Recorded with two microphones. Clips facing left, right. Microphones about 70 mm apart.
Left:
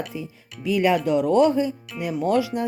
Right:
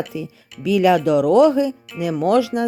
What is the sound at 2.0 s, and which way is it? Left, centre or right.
Speech, right.